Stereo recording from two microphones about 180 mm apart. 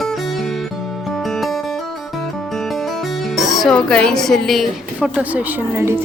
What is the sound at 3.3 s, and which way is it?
Speech, centre (ahead or behind).